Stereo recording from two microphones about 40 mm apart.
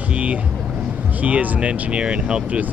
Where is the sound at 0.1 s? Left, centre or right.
Right.